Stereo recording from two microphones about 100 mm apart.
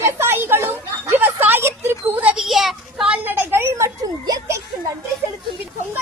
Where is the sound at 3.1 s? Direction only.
20° right (ahead or behind); by 4.4 s 35° right (ahead or behind).